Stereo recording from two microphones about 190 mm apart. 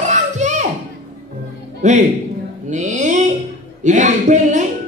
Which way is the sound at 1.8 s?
40° right (ahead or behind).